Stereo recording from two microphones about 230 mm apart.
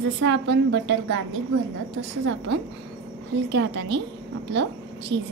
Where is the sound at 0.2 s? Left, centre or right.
Right.